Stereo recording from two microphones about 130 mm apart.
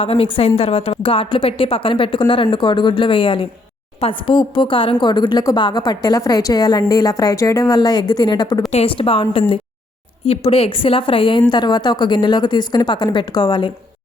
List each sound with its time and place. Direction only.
0.0 s a woman's voice: 45° left (ahead or behind); by 8.6 s 30° left (ahead or behind)
8.7 s a woman's voice: 45° left (ahead or behind)
10.2 s a woman's voice: 45° left (ahead or behind)